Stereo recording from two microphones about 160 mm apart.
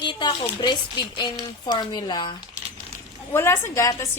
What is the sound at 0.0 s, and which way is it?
Speech, 30° left (ahead or behind).